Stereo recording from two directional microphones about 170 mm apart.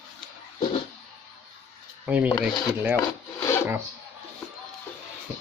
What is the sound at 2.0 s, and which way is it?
Speech, 10° right (ahead or behind).